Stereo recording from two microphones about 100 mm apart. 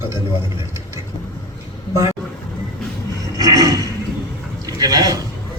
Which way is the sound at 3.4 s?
35° right (ahead or behind).